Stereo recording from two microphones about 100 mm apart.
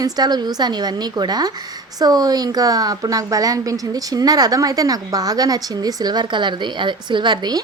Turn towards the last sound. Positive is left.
turn(degrees=-45)  # may be behind; listen again after turning